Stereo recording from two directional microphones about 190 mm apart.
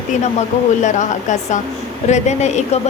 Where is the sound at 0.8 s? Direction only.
40° left (ahead or behind).